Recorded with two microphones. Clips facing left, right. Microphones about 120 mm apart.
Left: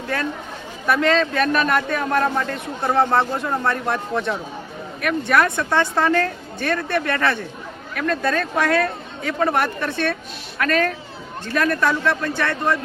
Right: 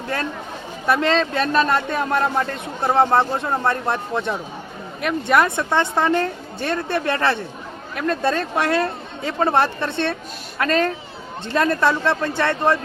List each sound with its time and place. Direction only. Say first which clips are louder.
0.9 s speech: even; 25° right (ahead or behind)